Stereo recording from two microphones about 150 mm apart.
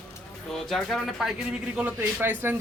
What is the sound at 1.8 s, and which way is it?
Speech, 10° right (ahead or behind).